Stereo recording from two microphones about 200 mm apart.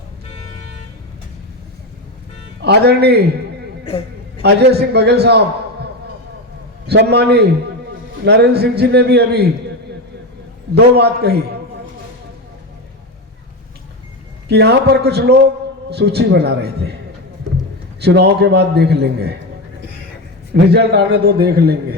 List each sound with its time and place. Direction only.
2.6 s a man's voice: 55° right (ahead or behind)
4.4 s a man's voice: 55° right (ahead or behind)
6.8 s a man's voice: 55° right (ahead or behind)
10.8 s a man's voice: 55° right (ahead or behind)
14.4 s a man's voice: 55° right (ahead or behind)
18.0 s a man's voice: 55° right (ahead or behind)
20.5 s a man's voice: 55° right (ahead or behind)